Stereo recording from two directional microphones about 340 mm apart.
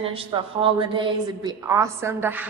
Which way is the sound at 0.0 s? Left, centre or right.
Centre.